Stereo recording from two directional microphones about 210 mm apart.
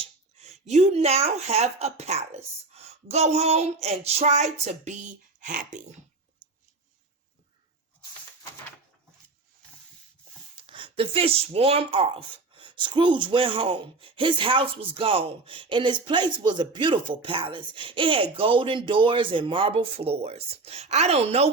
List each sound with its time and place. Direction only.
0.0 s a sound: 30° right (ahead or behind)
0.9 s speech: 30° right (ahead or behind)
10.5 s speech: 25° right (ahead or behind)